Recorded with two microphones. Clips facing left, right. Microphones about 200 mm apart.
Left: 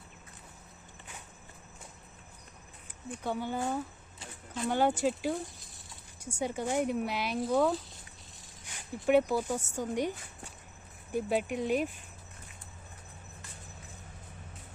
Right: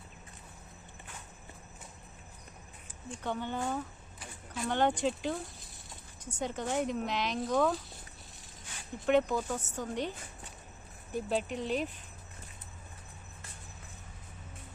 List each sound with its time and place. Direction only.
3.2 s speech: 10° left (ahead or behind)
4.2 s a sound: 25° left (ahead or behind)
4.7 s speech: 5° left (ahead or behind)